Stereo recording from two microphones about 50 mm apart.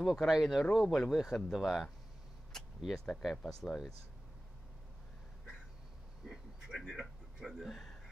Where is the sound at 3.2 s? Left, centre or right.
Centre.